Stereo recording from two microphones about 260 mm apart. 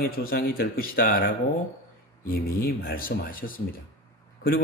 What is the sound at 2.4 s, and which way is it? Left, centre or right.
A man's voice, left.